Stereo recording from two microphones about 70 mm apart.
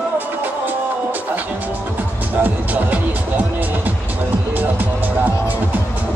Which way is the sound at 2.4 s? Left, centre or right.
Right.